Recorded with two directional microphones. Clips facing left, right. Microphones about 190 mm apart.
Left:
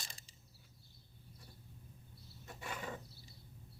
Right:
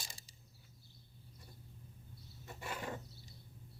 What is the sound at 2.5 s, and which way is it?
Wild animals, 5° right (ahead or behind).